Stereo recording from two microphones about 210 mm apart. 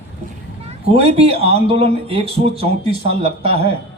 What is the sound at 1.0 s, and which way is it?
Speech, 30° right (ahead or behind).